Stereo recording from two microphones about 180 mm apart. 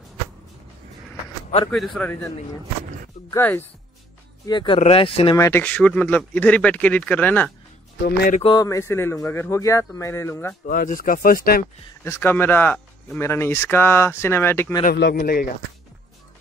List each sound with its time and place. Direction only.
1.7 s speech: 5° left (ahead or behind)
3.3 s speech: 15° left (ahead or behind)
4.5 s speech: 25° left (ahead or behind)
5.4 s speech: 10° left (ahead or behind)
8.5 s speech: 20° left (ahead or behind)
10.7 s speech: 50° left (ahead or behind)
12.0 s speech: 10° left (ahead or behind)
14.9 s speech: 60° left (ahead or behind)